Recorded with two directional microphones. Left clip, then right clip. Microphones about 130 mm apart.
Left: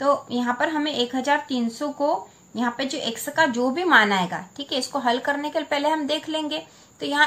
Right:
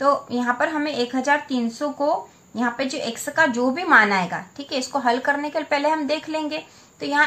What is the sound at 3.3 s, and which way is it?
A woman's voice, 20° right (ahead or behind).